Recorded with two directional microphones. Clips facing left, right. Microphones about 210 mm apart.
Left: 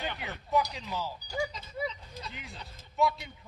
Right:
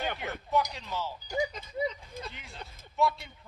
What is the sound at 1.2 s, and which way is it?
Speech, 20° right (ahead or behind).